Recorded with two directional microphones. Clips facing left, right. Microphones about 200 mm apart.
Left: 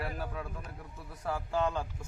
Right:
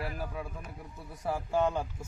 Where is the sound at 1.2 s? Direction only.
15° right (ahead or behind).